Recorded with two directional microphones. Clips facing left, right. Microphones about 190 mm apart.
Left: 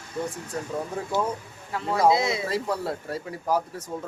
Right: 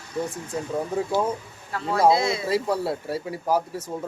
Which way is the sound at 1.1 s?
10° right (ahead or behind).